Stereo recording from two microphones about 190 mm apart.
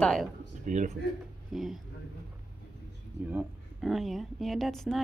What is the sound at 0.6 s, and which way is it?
Speech, 40° right (ahead or behind).